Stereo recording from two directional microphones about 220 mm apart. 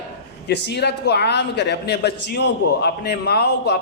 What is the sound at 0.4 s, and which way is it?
A woman's voice, 50° left (ahead or behind).